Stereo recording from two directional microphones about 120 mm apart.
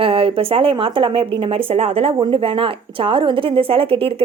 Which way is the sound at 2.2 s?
50° right (ahead or behind).